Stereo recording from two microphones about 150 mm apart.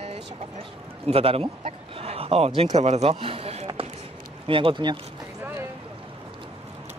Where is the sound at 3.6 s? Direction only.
35° right (ahead or behind).